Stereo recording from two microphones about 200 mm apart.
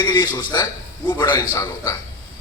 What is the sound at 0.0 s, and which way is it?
A man's voice, 20° left (ahead or behind).